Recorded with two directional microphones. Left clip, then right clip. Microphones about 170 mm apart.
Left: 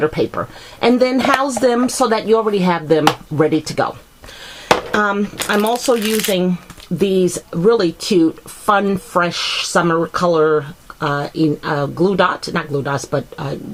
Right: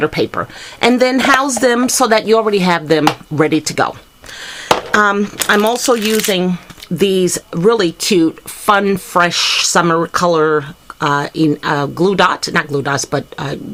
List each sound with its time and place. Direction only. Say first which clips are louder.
0.0 s speech: right 2 dB; 25° right (ahead or behind)
6.0 s speech: right 3 dB; 5° right (ahead or behind)
7.0 s speech: right 2 dB; 20° right (ahead or behind)